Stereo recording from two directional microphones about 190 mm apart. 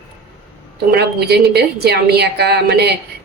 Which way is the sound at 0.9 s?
60° right (ahead or behind).